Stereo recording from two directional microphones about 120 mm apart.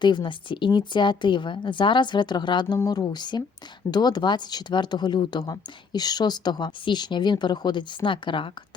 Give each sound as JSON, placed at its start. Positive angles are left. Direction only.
{"t": 0.0, "sound": "speech", "side_deg": 40}
{"t": 2.7, "sound": "speech", "side_deg": 30}